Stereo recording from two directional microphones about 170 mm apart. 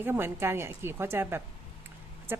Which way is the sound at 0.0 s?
15° right (ahead or behind).